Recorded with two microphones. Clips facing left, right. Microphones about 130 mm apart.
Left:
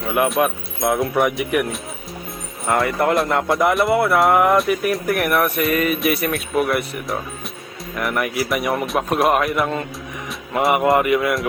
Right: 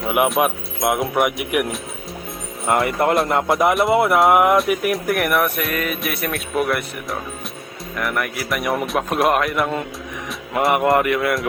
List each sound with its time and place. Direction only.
0.4 s speech: 15° right (ahead or behind)
2.6 s speech: 25° right (ahead or behind)
4.7 s speech: 5° right (ahead or behind)